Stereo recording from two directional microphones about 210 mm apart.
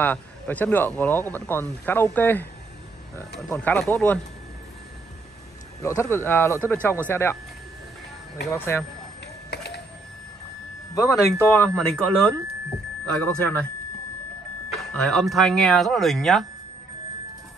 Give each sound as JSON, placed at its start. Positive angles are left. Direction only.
{"t": 0.0, "sound": "speech", "side_deg": 10}
{"t": 3.4, "sound": "speech", "side_deg": 5}
{"t": 5.8, "sound": "speech", "side_deg": 15}
{"t": 8.5, "sound": "speech", "side_deg": 10}
{"t": 9.2, "sound": "a sound", "side_deg": 50}
{"t": 11.0, "sound": "speech", "side_deg": 15}
{"t": 14.7, "sound": "speech", "side_deg": 0}